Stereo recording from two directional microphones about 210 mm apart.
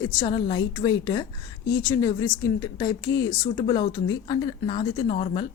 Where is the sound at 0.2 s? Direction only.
20° left (ahead or behind).